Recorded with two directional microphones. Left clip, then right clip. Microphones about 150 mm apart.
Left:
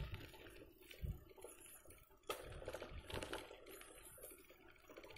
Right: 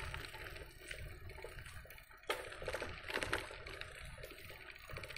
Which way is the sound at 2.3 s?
10° right (ahead or behind).